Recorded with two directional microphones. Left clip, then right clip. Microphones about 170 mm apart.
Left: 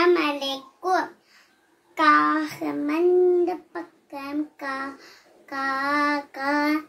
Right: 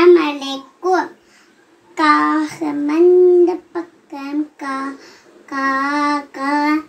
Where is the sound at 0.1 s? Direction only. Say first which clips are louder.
Right 9 dB; 20° left (ahead or behind).